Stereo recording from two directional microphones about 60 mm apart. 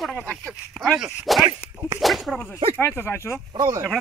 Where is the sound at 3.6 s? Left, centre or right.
Right.